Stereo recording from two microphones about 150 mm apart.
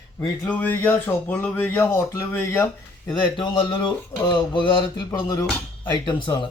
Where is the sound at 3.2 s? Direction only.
35° left (ahead or behind).